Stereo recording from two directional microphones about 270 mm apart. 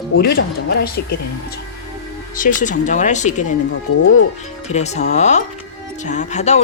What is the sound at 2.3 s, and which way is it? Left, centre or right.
A woman's voice, left.